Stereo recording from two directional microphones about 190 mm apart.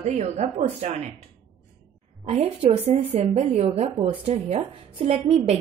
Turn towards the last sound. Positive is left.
turn(degrees=-35)  # may be behind; listen again after turning